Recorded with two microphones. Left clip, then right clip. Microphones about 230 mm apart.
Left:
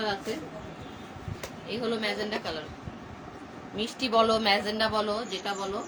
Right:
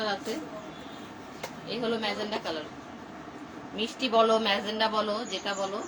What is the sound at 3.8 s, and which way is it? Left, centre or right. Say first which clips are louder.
Speech: even; left.